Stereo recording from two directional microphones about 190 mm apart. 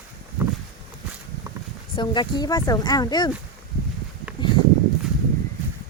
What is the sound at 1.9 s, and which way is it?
Speech, 25° left (ahead or behind).